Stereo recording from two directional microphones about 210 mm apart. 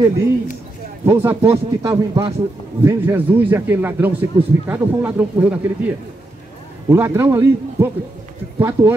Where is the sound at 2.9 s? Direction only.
10° right (ahead or behind).